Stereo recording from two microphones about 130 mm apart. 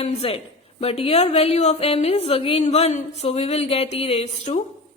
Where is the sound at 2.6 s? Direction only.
55° left (ahead or behind).